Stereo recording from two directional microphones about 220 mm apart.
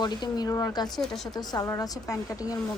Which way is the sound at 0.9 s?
Centre (ahead or behind).